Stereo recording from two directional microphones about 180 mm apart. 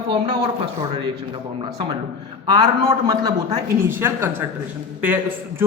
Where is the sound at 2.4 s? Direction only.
25° right (ahead or behind).